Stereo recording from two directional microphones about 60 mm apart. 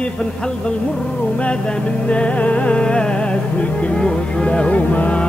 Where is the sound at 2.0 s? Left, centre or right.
Centre.